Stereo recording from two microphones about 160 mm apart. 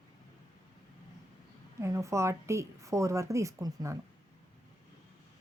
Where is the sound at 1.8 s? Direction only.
20° right (ahead or behind).